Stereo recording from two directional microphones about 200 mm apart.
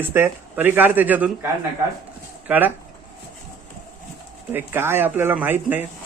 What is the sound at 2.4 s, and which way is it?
Speech, 10° right (ahead or behind).